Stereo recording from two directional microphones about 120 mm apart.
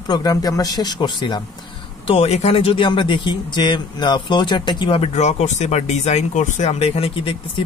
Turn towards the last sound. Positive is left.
turn(degrees=50)  # may be behind; listen again after turning